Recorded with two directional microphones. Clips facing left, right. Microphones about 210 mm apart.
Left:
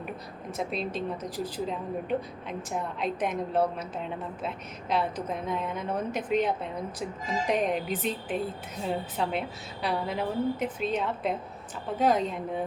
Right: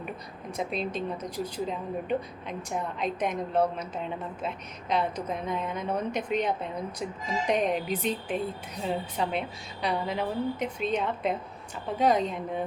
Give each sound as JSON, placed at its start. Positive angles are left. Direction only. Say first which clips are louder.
{"t": 0.5, "sound": "speech", "louder": "right 1 dB", "side_deg": 0}